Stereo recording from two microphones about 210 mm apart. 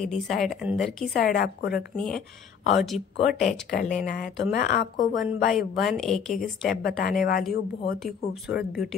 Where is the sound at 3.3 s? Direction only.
40° left (ahead or behind).